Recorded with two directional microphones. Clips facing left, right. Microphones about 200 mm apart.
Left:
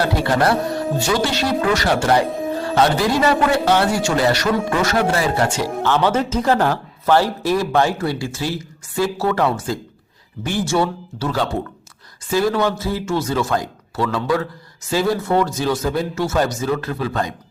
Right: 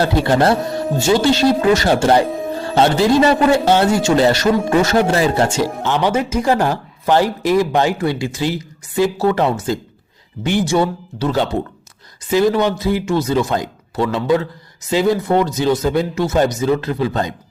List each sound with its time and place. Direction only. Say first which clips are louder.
0.0 s a man's voice: right 3 dB; 25° right (ahead or behind)
2.2 s music: right 1 dB; centre (ahead or behind)
2.7 s a man's voice: right 5 dB; 25° right (ahead or behind)